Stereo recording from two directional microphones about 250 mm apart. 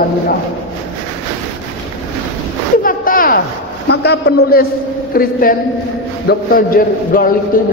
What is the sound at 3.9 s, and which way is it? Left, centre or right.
A man's voice, left.